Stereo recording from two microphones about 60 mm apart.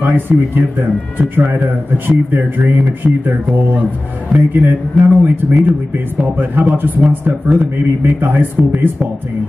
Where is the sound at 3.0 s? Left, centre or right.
Right.